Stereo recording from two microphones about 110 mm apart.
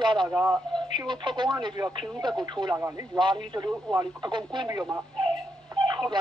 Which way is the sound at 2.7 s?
25° right (ahead or behind).